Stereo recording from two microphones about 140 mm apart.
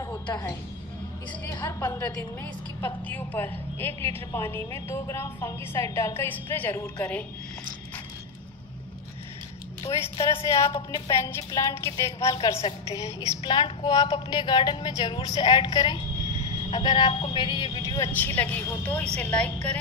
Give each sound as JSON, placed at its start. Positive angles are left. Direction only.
{"t": 0.3, "sound": "a woman's voice", "side_deg": 25}
{"t": 10.2, "sound": "a woman's voice", "side_deg": 20}
{"t": 17.8, "sound": "a woman's voice", "side_deg": 20}